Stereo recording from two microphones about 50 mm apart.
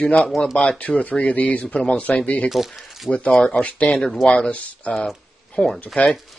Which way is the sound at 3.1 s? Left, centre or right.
Left.